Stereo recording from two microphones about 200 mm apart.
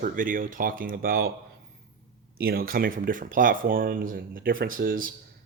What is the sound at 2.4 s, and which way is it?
Speech, 50° right (ahead or behind).